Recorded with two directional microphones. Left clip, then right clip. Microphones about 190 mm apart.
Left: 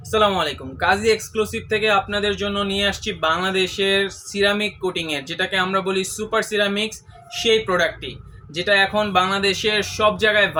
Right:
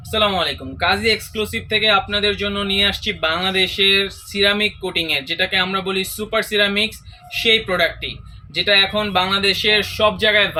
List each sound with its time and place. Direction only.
0.1 s speech: 40° left (ahead or behind)